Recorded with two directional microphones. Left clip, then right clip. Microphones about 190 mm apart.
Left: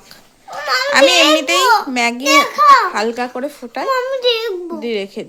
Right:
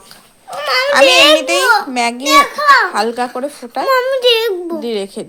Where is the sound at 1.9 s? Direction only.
5° left (ahead or behind).